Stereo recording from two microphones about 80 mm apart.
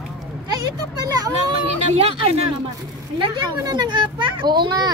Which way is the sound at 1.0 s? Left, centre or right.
Right.